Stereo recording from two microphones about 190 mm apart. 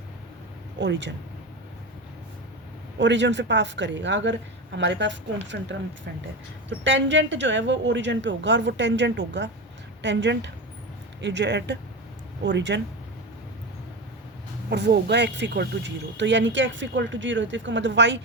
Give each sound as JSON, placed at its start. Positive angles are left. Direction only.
{"t": 0.8, "sound": "speech", "side_deg": -70}
{"t": 3.0, "sound": "speech", "side_deg": -70}
{"t": 14.7, "sound": "speech", "side_deg": -60}